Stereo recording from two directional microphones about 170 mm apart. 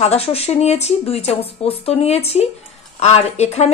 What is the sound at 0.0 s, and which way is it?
Speech, 35° left (ahead or behind).